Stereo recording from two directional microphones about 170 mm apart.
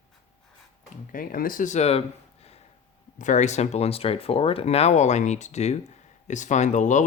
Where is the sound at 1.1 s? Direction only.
55° left (ahead or behind).